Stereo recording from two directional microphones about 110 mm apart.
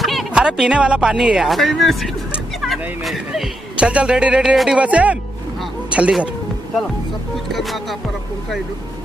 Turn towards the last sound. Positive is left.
turn(degrees=0)  # may be behind; listen again after turning